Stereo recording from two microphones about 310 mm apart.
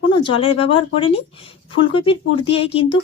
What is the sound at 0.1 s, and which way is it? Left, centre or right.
Speech, centre.